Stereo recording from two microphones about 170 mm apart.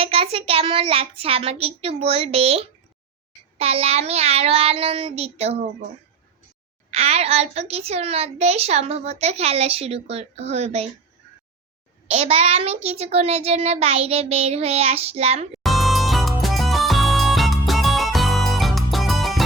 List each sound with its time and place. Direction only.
0.0 s a woman's voice: 35° right (ahead or behind)
6.9 s a woman's voice: 40° right (ahead or behind)
12.0 s a woman's voice: 40° right (ahead or behind)
15.6 s music: centre (ahead or behind)